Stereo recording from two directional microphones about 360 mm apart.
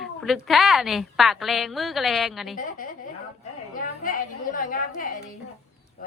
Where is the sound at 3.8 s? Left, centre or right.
Left.